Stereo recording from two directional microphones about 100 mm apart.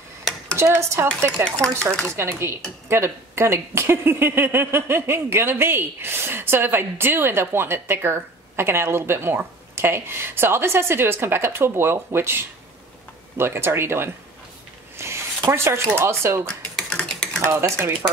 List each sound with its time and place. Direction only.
0.6 s speech: 25° right (ahead or behind)
16.7 s typing: 5° left (ahead or behind)
17.4 s speech: 25° right (ahead or behind)